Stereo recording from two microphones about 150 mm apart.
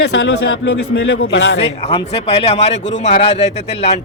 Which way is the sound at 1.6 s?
40° left (ahead or behind).